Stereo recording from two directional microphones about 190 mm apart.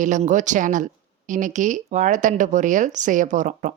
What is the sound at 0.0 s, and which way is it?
Speech, 40° right (ahead or behind).